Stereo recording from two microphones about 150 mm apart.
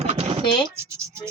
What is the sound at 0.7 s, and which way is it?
Speech, 20° right (ahead or behind).